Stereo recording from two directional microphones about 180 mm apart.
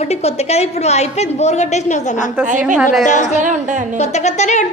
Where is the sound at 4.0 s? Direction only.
40° left (ahead or behind).